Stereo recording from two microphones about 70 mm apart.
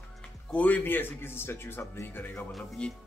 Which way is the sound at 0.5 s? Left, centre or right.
Left.